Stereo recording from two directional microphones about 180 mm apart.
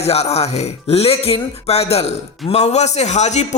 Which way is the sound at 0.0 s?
35° left (ahead or behind).